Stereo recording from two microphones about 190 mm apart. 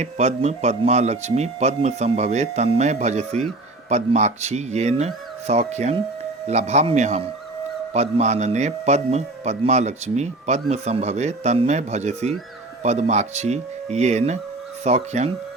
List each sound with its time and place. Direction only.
0.0 s a man's voice: 35° right (ahead or behind)